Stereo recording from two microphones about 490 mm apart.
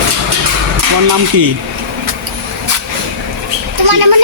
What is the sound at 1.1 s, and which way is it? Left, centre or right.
Speech, right.